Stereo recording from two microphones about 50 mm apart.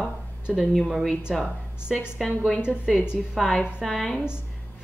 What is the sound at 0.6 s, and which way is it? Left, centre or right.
Speech, centre.